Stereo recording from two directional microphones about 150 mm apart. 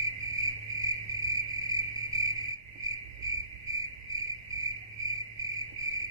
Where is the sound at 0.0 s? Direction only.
20° right (ahead or behind).